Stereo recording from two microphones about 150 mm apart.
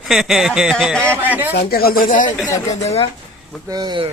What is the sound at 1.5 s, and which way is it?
Speech, 90° left.